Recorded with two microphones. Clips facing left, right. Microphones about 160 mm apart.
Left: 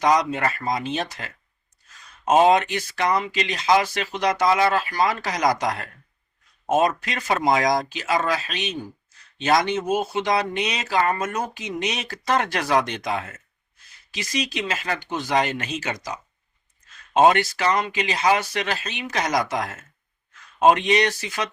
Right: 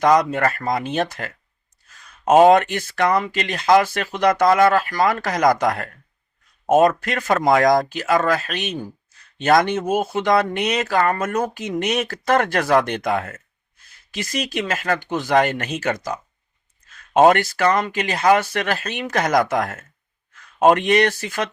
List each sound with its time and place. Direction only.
0.0 s speech: 55° right (ahead or behind)